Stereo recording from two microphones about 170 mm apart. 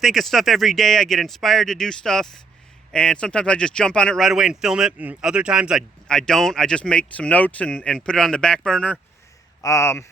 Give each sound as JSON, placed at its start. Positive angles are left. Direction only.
{"t": 0.0, "sound": "speech", "side_deg": 0}
{"t": 9.6, "sound": "speech", "side_deg": 15}